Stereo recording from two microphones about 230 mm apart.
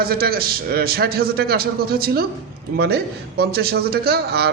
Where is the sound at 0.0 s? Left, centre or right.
Right.